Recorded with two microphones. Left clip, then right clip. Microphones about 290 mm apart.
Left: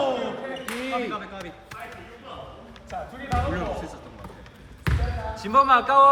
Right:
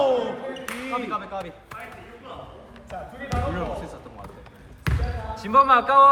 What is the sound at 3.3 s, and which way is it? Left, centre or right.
Basketball bounce, centre.